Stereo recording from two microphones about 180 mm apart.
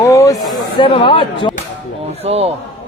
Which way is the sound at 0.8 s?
30° left (ahead or behind).